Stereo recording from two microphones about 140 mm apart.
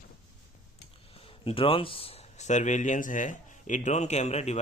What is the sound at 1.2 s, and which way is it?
Speech, 40° left (ahead or behind).